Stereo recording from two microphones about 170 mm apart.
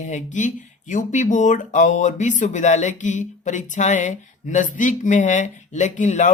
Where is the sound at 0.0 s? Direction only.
45° left (ahead or behind).